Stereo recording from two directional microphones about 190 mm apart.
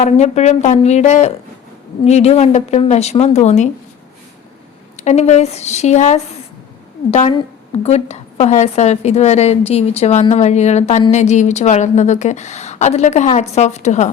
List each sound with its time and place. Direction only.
0.0 s a woman's voice: 35° left (ahead or behind)
4.9 s a woman's voice: 35° left (ahead or behind)